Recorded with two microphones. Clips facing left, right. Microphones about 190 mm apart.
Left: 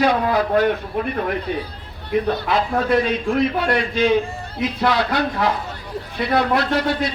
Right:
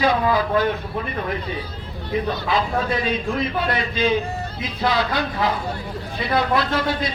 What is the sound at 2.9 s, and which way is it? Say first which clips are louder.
A man's voice: left 4 dB; 70° left (ahead or behind).